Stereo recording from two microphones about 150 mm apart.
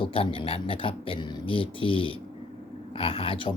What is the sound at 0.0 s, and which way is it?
Speech, 35° left (ahead or behind).